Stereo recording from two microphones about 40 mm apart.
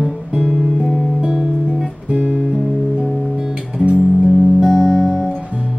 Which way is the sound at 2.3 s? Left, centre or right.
Centre.